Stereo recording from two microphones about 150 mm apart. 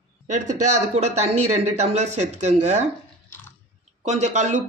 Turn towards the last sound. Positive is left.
turn(degrees=-55)  # may be behind; listen again after turning